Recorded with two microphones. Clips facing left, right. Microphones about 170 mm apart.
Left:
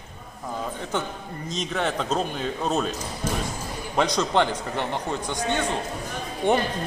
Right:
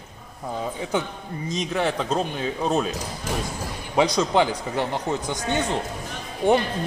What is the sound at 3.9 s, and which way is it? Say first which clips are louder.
Speech: right 2 dB; 10° right (ahead or behind).